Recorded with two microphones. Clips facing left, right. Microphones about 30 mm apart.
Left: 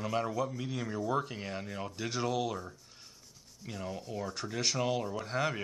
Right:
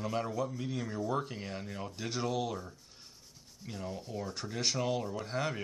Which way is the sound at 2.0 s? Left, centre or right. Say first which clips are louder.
Left 1 dB; centre.